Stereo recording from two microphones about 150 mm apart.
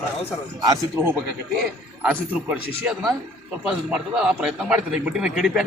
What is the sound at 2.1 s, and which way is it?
A man's voice, 10° right (ahead or behind).